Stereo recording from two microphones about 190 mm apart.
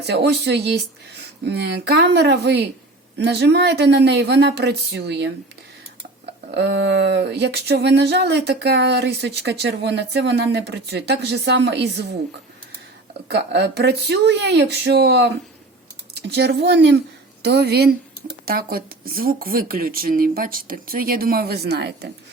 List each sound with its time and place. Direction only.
0.1 s speech: 60° right (ahead or behind)
6.6 s speech: 65° right (ahead or behind)
13.2 s speech: 60° right (ahead or behind)
16.3 s speech: 60° right (ahead or behind)